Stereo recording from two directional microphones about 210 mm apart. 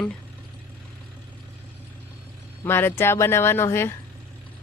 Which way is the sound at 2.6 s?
10° left (ahead or behind).